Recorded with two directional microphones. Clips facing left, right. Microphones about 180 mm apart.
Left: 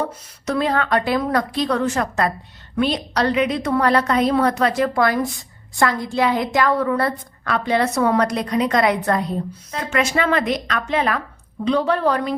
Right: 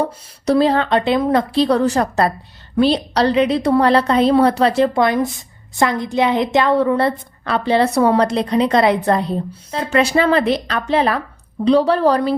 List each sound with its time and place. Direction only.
0.0 s a woman's voice: 30° right (ahead or behind)